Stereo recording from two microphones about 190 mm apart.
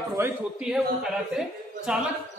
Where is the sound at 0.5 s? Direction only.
5° right (ahead or behind).